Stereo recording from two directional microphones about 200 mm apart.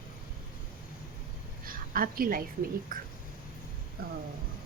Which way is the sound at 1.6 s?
45° right (ahead or behind).